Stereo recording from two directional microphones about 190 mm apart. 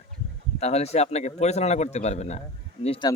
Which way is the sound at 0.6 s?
35° left (ahead or behind).